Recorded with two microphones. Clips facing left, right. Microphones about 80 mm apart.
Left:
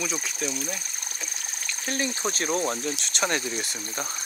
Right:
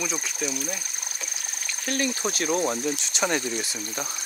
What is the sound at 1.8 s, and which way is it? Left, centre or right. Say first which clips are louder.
Speech: right 2 dB; left.